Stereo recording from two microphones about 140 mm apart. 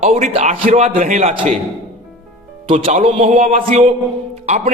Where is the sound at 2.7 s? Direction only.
65° right (ahead or behind).